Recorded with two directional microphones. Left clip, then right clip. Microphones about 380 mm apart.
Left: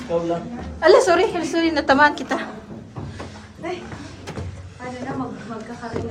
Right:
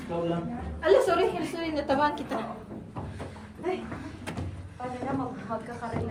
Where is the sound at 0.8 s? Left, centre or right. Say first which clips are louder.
Left 8 dB; centre.